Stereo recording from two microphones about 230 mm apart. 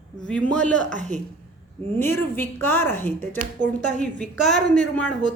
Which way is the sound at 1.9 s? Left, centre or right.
Centre.